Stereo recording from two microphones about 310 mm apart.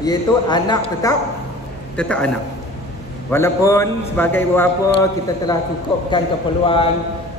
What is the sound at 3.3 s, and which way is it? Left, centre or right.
A woman's voice, centre.